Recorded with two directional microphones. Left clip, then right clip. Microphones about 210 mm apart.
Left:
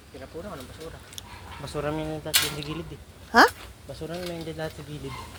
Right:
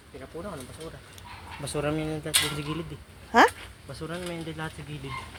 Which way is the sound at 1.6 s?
55° right (ahead or behind).